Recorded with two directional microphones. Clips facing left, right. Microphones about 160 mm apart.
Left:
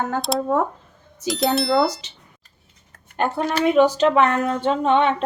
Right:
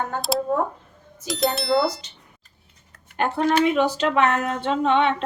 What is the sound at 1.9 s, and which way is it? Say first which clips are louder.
Speech: left 2 dB; 90° left.